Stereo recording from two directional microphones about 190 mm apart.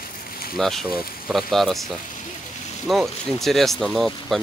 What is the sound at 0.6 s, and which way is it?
Speech, centre (ahead or behind).